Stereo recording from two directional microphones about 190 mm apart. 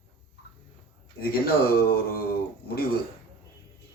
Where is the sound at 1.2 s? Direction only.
55° left (ahead or behind).